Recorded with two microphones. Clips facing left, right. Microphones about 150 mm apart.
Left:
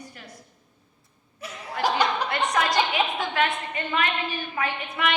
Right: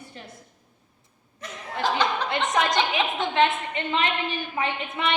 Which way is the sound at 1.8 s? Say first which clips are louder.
Left 1 dB; 10° left (ahead or behind).